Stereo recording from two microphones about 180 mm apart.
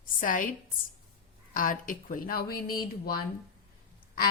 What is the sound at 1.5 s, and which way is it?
A woman's voice, 50° left (ahead or behind).